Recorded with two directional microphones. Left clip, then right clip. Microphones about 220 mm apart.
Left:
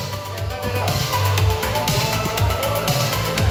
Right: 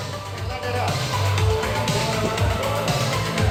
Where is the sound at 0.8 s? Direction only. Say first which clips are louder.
Left 3 dB; 50° left (ahead or behind).